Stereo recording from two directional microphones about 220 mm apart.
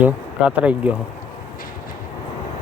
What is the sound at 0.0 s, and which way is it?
Speech, 5° right (ahead or behind).